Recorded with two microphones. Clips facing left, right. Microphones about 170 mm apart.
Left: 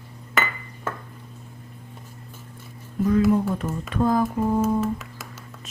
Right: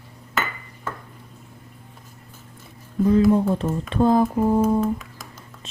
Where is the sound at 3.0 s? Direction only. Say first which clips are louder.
Right 3 dB; 30° right (ahead or behind).